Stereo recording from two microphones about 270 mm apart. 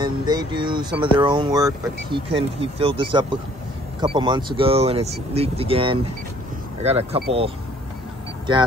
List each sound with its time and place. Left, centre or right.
0.0 s speech: centre
8.5 s speech: centre